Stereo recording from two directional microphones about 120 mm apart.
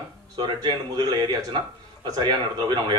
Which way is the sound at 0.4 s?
35° right (ahead or behind).